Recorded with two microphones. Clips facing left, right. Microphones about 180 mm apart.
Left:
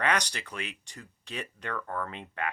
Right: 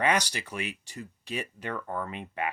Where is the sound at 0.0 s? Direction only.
10° right (ahead or behind).